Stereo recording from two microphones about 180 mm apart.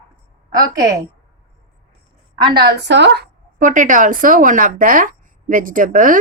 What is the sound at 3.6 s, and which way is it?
Speech, 45° right (ahead or behind).